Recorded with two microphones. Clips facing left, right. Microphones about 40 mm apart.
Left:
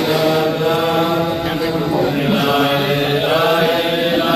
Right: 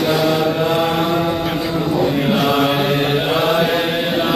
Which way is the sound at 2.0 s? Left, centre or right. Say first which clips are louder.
Right 1 dB; centre.